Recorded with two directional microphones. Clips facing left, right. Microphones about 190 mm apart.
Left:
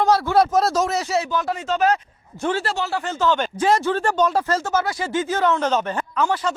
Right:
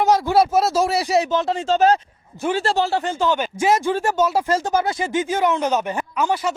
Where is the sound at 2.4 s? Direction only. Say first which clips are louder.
Right 1 dB; 10° right (ahead or behind).